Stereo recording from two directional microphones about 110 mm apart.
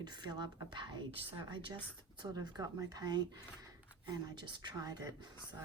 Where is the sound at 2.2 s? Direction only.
35° right (ahead or behind).